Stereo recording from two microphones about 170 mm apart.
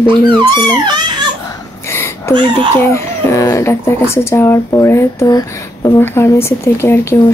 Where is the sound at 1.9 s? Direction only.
15° left (ahead or behind).